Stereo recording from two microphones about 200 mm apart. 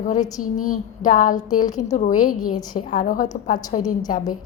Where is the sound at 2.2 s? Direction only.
45° left (ahead or behind).